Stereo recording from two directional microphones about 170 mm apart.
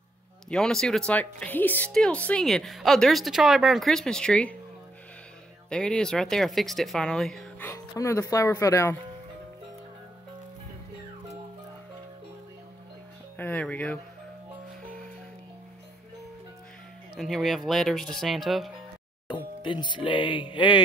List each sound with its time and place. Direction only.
0.5 s speech: 5° left (ahead or behind)
5.7 s speech: 5° left (ahead or behind)
7.6 s speech: 15° left (ahead or behind)
13.4 s speech: 10° left (ahead or behind)
17.2 s speech: centre (ahead or behind)
19.2 s speech: 30° left (ahead or behind)